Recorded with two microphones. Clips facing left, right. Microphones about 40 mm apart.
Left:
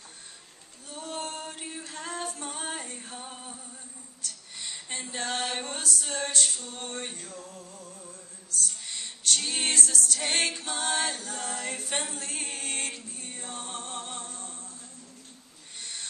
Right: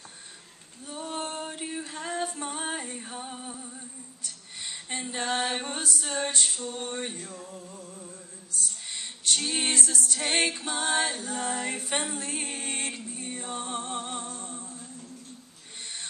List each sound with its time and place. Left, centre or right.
0.8 s female singing: centre
4.2 s a sound: centre
6.9 s music: centre
8.9 s a capella: centre